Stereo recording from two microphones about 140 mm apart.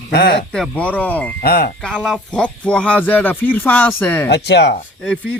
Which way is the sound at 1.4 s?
90° left.